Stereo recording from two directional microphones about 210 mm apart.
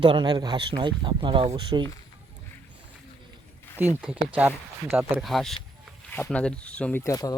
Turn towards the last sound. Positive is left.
turn(degrees=15)  # may be behind; listen again after turning